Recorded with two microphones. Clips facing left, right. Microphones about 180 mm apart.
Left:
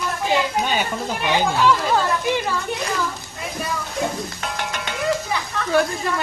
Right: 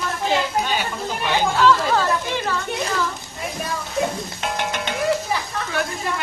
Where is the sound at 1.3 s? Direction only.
15° left (ahead or behind).